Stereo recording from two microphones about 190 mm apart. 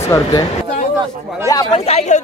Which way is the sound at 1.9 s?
35° left (ahead or behind).